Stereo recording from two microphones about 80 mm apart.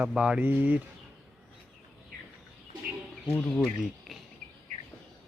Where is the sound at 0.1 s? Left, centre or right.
Centre.